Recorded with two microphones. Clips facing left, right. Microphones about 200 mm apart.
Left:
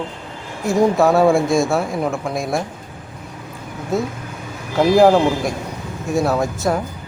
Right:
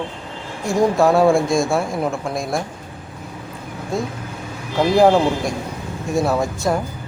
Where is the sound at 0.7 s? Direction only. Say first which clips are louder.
Left 1 dB; centre (ahead or behind).